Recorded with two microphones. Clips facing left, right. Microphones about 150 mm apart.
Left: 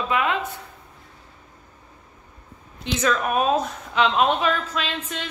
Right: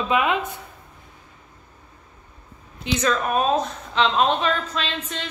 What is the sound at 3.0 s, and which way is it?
A woman's voice, 10° left (ahead or behind).